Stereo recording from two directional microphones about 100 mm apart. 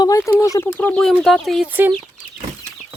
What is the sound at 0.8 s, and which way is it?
Speech, 15° left (ahead or behind).